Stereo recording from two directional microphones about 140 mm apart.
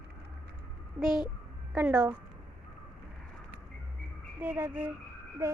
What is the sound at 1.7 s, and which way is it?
Speech, 15° right (ahead or behind).